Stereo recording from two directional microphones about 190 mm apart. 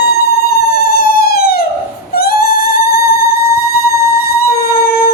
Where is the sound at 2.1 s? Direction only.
55° left (ahead or behind).